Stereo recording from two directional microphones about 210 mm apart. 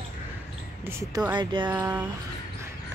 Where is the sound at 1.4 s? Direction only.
20° right (ahead or behind).